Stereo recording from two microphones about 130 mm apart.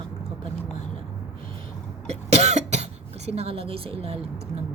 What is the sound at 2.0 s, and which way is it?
Speech, 55° right (ahead or behind).